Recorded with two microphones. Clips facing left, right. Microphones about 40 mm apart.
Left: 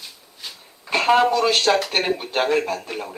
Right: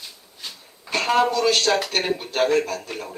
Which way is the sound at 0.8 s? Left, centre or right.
Centre.